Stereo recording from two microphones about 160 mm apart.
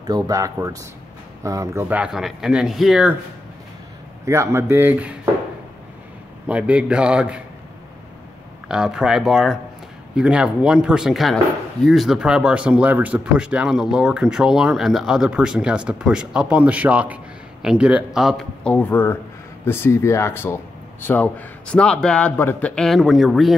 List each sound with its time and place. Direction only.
0.0 s speech: 20° right (ahead or behind); by 3.2 s 5° right (ahead or behind)
4.3 s a man's voice: 15° right (ahead or behind)
6.4 s a man's voice: 5° right (ahead or behind)
8.6 s speech: 5° right (ahead or behind)